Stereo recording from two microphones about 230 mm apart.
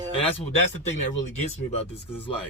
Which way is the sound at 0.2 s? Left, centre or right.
Left.